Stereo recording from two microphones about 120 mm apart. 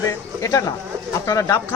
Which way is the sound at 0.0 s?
30° left (ahead or behind).